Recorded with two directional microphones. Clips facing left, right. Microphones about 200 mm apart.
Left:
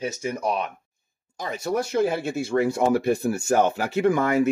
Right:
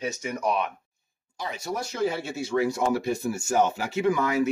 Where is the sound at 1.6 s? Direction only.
55° left (ahead or behind).